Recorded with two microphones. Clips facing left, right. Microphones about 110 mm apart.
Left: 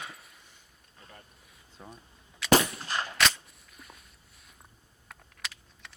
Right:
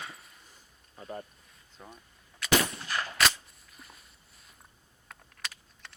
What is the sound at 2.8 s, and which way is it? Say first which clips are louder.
Gunshot: left 1 dB; 25° left (ahead or behind).